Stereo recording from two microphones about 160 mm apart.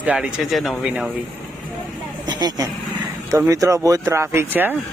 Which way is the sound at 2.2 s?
25° right (ahead or behind).